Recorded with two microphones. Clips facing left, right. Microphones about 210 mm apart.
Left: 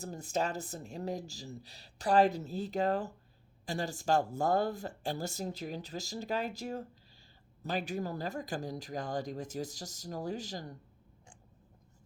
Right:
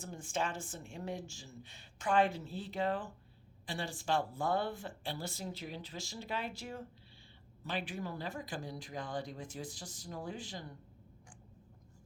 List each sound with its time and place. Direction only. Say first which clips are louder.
0.0 s speech: left 4 dB; 40° left (ahead or behind)